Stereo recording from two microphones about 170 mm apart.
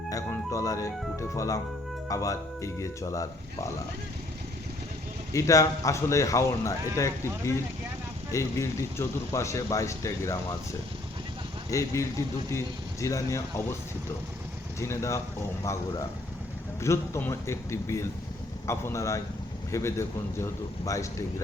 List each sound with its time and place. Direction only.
0.1 s music: 20° left (ahead or behind)
2.0 s speech: 20° left (ahead or behind)
5.3 s speech: 20° left (ahead or behind)
14.8 s speech: 15° left (ahead or behind)